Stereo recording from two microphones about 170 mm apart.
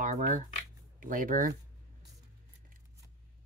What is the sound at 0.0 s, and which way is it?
Speech, 50° right (ahead or behind).